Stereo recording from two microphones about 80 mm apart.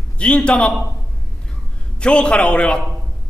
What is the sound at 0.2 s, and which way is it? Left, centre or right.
Speech, centre.